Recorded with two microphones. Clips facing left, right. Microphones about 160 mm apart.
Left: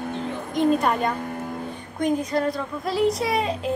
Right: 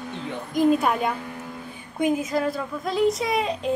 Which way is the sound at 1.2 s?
50° left (ahead or behind).